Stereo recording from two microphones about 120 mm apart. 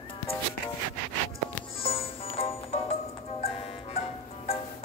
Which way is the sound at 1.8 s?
55° left (ahead or behind).